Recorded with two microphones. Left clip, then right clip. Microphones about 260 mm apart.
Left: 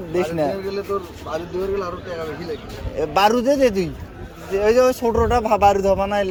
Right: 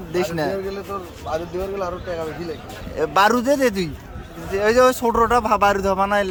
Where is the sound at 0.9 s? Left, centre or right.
Right.